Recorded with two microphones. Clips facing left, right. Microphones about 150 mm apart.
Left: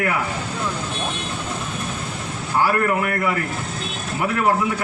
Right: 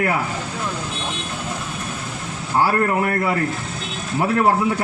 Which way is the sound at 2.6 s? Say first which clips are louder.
Right 1 dB; 30° right (ahead or behind).